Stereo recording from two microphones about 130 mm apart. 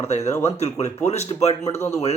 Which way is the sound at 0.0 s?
55° left (ahead or behind).